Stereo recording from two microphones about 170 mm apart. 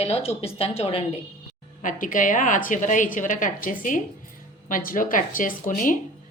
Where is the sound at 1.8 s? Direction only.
50° left (ahead or behind).